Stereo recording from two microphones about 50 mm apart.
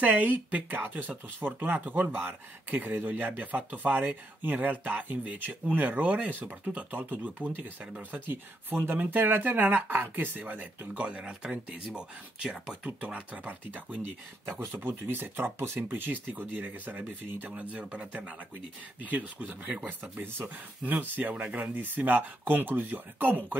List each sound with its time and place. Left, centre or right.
0.0 s speech: right
7.2 s speech: right
8.3 s speech: right
11.0 s speech: right
14.8 s speech: right